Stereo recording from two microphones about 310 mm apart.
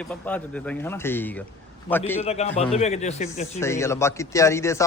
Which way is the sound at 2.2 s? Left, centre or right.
Centre.